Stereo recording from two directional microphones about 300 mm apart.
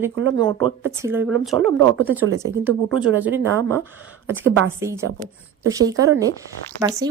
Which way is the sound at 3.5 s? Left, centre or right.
Centre.